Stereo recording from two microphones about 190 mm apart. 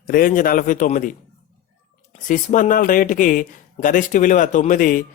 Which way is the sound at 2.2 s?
45° left (ahead or behind).